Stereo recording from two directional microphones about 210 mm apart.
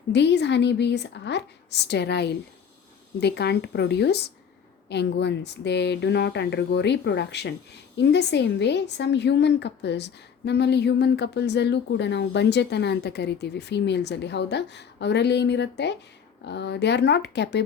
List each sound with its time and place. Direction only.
0.1 s a woman's voice: 55° left (ahead or behind)